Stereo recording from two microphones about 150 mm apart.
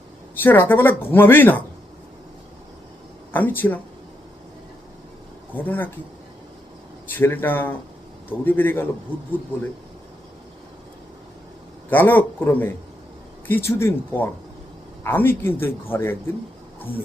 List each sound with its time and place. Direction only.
0.4 s speech: 15° left (ahead or behind)
3.3 s speech: 15° left (ahead or behind)
5.5 s speech: 10° left (ahead or behind)
7.1 s speech: 15° left (ahead or behind)
11.9 s speech: 10° left (ahead or behind)